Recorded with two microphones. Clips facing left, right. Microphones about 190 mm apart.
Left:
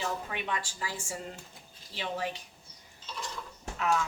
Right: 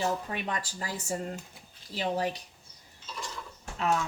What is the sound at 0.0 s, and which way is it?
Speech, 40° right (ahead or behind).